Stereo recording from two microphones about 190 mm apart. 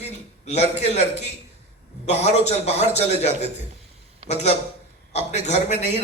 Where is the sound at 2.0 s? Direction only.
35° left (ahead or behind).